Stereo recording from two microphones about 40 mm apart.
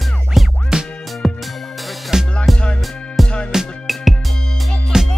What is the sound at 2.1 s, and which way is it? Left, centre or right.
Music, centre.